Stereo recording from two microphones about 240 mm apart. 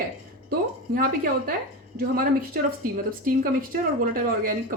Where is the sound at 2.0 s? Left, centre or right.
Right.